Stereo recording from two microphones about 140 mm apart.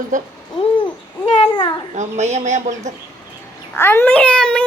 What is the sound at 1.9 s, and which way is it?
A woman's voice, 55° right (ahead or behind).